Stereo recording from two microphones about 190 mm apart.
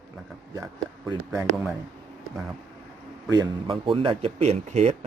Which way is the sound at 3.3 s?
25° right (ahead or behind).